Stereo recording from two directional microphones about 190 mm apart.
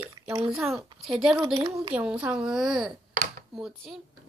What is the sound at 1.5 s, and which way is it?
Speech, 20° right (ahead or behind).